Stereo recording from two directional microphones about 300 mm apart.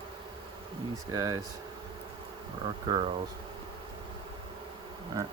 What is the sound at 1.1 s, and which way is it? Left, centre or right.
Speech, centre.